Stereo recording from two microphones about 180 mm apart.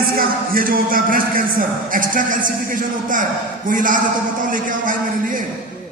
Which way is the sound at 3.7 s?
45° right (ahead or behind).